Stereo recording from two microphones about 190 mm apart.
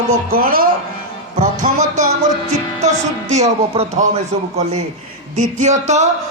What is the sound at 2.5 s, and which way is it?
Music, 35° right (ahead or behind).